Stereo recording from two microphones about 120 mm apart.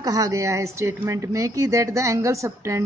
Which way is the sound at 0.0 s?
30° right (ahead or behind).